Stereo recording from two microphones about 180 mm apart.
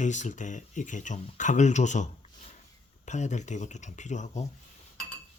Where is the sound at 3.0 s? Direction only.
40° left (ahead or behind).